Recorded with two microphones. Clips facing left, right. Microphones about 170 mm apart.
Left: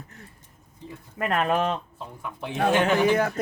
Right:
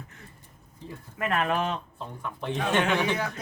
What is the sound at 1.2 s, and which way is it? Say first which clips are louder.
Speech: left 3 dB; 40° left (ahead or behind).